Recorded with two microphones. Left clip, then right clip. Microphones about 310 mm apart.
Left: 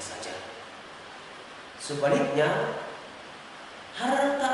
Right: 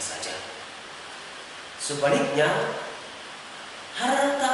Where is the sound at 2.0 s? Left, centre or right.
Centre.